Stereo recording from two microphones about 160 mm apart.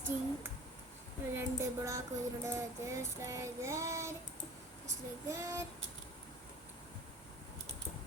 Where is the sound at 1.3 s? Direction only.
20° right (ahead or behind).